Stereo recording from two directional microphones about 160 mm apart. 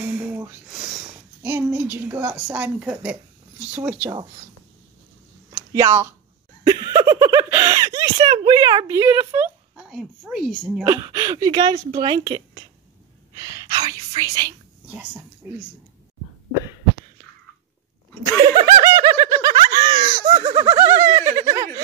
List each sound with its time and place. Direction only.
0.0 s a sound: 10° right (ahead or behind)
1.0 s speech: 15° right (ahead or behind)
5.5 s speech: 20° right (ahead or behind)
6.6 s a sound: 25° right (ahead or behind)
7.4 s speech: 15° right (ahead or behind)
9.8 s a sound: centre (ahead or behind)
10.3 s speech: centre (ahead or behind)
10.8 s speech: 20° right (ahead or behind)
13.4 s whispering: 25° right (ahead or behind)
18.4 s snicker: 25° right (ahead or behind)
20.0 s laughter: 30° right (ahead or behind)
20.5 s speech: 20° right (ahead or behind)